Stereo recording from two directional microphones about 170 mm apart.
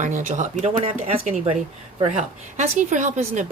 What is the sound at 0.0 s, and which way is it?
A woman's voice, 45° right (ahead or behind).